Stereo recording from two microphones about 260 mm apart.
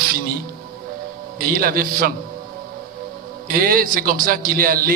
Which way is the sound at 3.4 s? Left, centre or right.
Right.